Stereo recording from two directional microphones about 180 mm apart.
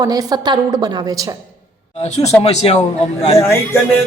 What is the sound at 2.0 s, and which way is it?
A man's voice, 40° left (ahead or behind).